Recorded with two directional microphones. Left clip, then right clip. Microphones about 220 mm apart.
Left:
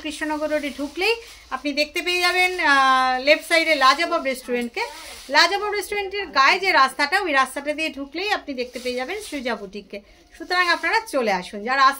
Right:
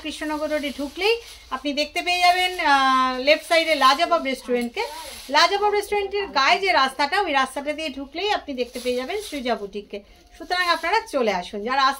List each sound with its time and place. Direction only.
0.0 s a woman's voice: 25° left (ahead or behind)